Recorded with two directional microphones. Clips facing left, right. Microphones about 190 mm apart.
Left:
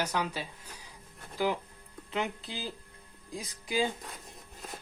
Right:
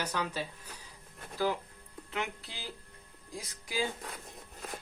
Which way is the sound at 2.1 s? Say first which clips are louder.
Left 4 dB; 20° left (ahead or behind).